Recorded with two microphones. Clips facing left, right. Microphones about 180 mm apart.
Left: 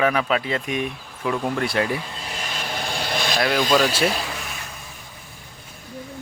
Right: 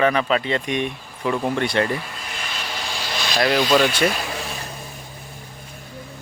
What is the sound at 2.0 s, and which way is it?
Vehicle, 30° left (ahead or behind).